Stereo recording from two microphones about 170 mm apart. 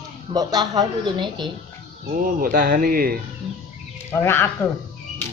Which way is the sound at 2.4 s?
55° right (ahead or behind).